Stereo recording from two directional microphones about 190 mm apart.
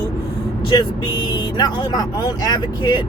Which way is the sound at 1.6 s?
20° left (ahead or behind).